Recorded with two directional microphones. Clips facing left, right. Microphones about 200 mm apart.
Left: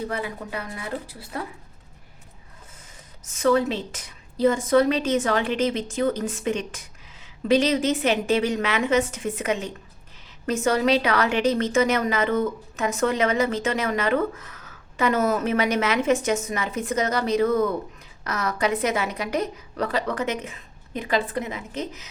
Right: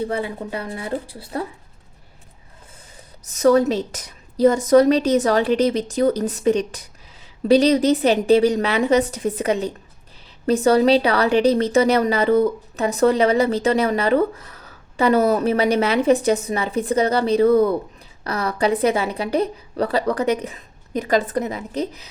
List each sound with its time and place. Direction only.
0.0 s speech: 30° right (ahead or behind)
3.2 s speech: 40° right (ahead or behind)